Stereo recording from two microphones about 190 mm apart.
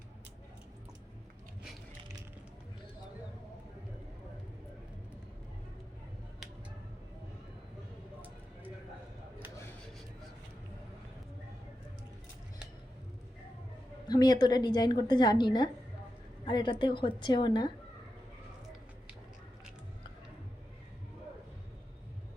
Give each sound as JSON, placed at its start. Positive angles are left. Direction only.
{"t": 14.1, "sound": "a woman's voice", "side_deg": 20}